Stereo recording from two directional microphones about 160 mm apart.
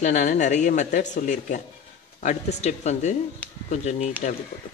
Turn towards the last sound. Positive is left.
turn(degrees=45)  # may be behind; listen again after turning